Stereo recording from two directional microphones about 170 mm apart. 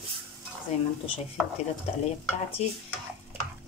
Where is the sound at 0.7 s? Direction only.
40° left (ahead or behind).